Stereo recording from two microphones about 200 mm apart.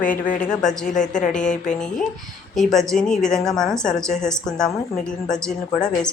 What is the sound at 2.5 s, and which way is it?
A woman's voice, centre (ahead or behind).